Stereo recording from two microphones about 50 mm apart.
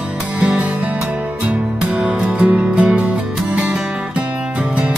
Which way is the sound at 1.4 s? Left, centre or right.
Right.